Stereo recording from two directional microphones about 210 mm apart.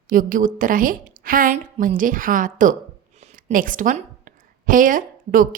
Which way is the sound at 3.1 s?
35° right (ahead or behind).